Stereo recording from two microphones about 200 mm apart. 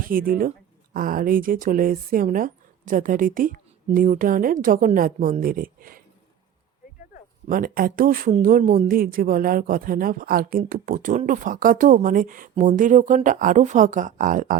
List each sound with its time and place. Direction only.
0.0 s speech: 45° right (ahead or behind)
7.4 s speech: 45° right (ahead or behind)